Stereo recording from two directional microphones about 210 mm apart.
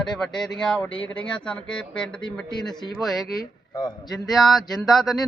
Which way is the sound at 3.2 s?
20° left (ahead or behind).